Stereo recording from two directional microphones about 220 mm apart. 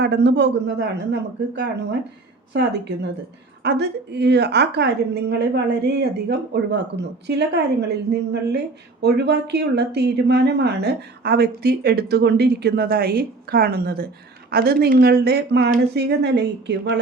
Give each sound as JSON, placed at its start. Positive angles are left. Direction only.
{"t": 0.0, "sound": "speech", "side_deg": -50}